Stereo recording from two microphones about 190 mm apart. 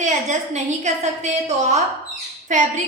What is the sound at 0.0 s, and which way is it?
A woman's voice, 40° right (ahead or behind).